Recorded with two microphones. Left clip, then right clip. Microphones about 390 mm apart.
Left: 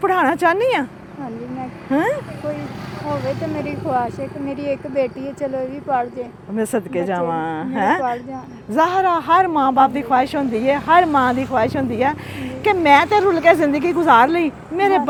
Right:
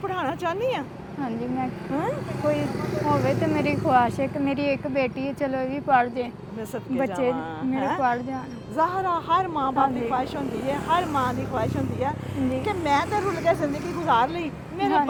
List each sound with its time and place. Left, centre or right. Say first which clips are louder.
0.0 s speech: left 11 dB; left
3.5 s speech: right 2 dB; centre
5.4 s speech: left 4 dB; centre
6.6 s a woman's voice: left 7 dB; left
12.6 s speech: left 13 dB; left